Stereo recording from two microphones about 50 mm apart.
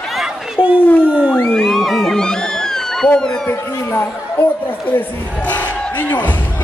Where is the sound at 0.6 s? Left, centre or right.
Centre.